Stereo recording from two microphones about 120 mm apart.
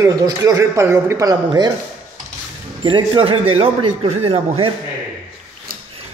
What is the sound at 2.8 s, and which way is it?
A man's voice, 45° right (ahead or behind).